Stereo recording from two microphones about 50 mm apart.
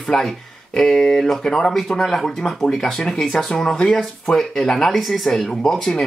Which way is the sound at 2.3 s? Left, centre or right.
Centre.